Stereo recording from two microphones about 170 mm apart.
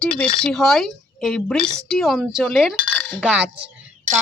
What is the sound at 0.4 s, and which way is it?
Speech, centre (ahead or behind).